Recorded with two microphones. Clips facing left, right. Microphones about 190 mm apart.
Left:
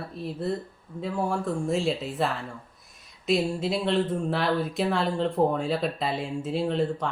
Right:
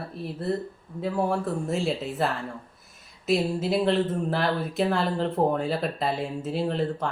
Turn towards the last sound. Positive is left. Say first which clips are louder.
# left 1 dB
turn(degrees=0)  # may be behind; listen again after turning